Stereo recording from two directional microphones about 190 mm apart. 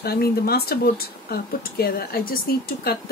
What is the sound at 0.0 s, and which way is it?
Speech, 55° left (ahead or behind).